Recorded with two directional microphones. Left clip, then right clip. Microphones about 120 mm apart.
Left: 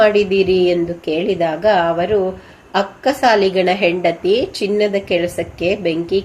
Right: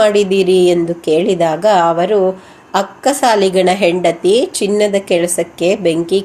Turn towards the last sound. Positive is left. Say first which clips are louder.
# right 4 dB
turn(degrees=-35)  # may be behind; listen again after turning